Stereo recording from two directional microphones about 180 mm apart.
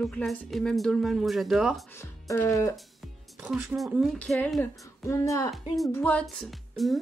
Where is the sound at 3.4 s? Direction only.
Centre (ahead or behind).